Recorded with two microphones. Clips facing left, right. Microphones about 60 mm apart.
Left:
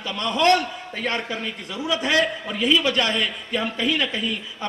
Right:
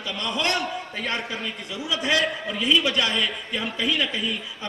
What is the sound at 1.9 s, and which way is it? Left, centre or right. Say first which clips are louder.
A man's voice: left 2 dB; left.